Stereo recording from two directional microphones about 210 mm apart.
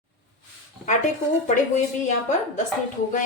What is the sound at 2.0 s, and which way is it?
Speech, 35° left (ahead or behind).